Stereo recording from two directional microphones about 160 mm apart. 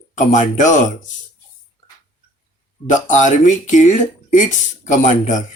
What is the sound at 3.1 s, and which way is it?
Speech, 50° left (ahead or behind).